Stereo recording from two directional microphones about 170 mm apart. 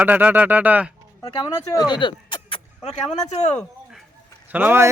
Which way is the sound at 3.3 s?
40° left (ahead or behind).